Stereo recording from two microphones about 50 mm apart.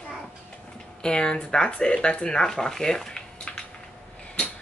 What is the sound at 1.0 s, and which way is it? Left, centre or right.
Speech, centre.